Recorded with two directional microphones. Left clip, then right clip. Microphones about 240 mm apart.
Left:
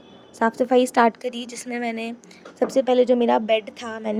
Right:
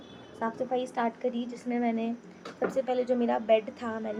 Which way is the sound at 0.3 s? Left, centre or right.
Left.